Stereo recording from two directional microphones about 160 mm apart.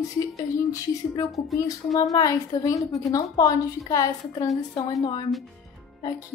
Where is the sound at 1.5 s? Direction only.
Centre (ahead or behind).